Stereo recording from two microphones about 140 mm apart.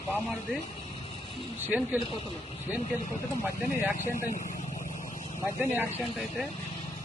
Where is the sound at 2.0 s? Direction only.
40° left (ahead or behind).